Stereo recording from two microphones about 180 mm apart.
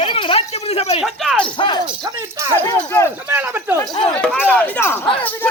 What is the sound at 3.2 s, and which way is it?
Speech, 10° right (ahead or behind).